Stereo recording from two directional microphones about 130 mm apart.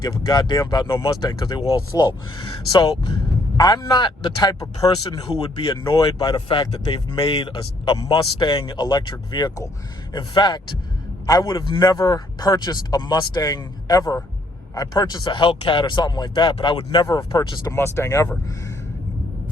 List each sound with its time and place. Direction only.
0.0 s speech: 30° left (ahead or behind)
3.6 s speech: 30° left (ahead or behind)
5.0 s speech: 45° left (ahead or behind)
6.0 s speech: 35° left (ahead or behind)